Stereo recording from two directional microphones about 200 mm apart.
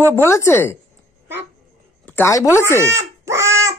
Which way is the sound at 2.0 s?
10° left (ahead or behind).